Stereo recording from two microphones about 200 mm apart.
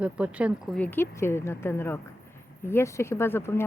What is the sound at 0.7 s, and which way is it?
Speech, 10° left (ahead or behind).